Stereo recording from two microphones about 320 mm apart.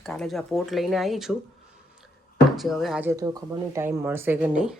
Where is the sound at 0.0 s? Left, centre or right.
Centre.